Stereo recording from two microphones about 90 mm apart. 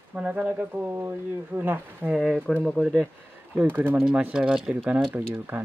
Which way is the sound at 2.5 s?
10° left (ahead or behind).